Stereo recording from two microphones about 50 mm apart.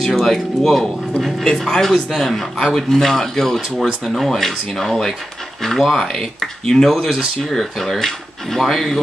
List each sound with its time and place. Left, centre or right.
0.0 s speech: centre